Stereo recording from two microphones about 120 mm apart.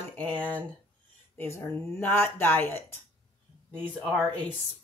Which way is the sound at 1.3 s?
15° left (ahead or behind).